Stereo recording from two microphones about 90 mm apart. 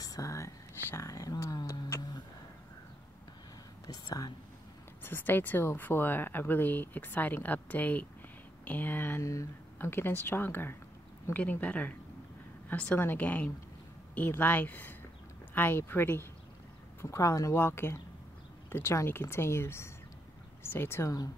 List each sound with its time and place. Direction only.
0.0 s whispering: 40° left (ahead or behind)
0.8 s a sound: 30° left (ahead or behind)
1.9 s music: 45° left (ahead or behind)
3.8 s speech: 45° left (ahead or behind)
5.0 s speech: 25° left (ahead or behind)
9.2 s speech: 35° left (ahead or behind)
9.8 s a woman's voice: 25° left (ahead or behind)
17.0 s speech: 35° left (ahead or behind)